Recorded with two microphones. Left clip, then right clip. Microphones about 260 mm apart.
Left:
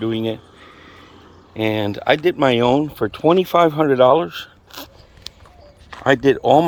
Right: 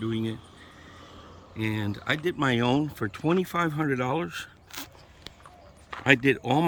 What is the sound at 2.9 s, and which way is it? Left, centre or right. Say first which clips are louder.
Speech: left 11 dB; right.